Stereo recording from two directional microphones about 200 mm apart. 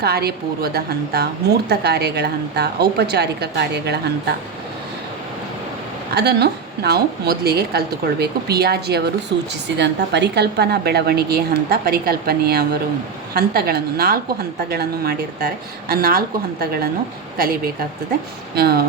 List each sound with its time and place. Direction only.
0.0 s a woman's voice: 50° right (ahead or behind)
6.1 s a woman's voice: 55° right (ahead or behind)